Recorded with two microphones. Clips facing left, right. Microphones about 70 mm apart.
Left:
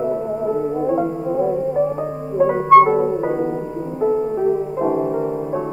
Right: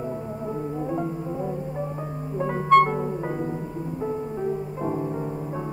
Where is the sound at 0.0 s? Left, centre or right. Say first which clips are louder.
Left 10 dB; left.